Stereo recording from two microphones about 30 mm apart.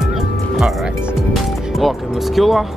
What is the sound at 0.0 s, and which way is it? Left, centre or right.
Music, centre.